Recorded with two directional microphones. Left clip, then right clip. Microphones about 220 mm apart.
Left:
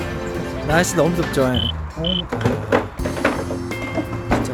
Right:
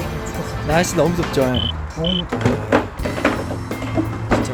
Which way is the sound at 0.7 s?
15° left (ahead or behind).